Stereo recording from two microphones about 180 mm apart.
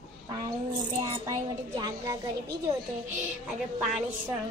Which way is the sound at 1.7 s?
20° right (ahead or behind).